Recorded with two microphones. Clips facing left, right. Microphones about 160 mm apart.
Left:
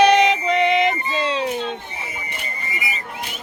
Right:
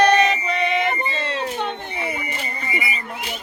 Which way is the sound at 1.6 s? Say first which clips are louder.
Right 2 dB; 60° right (ahead or behind).